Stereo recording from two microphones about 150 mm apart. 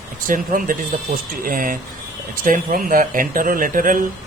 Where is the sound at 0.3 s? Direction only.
65° right (ahead or behind).